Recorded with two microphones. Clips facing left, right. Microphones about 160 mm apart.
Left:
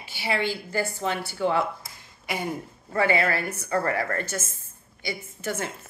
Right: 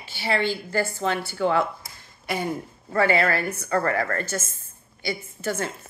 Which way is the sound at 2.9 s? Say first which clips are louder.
Right 2 dB; 15° left (ahead or behind).